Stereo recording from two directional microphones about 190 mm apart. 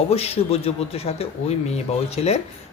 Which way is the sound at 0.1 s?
30° left (ahead or behind).